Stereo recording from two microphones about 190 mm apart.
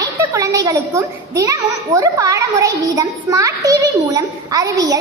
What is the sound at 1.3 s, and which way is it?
A child's voice, 20° right (ahead or behind).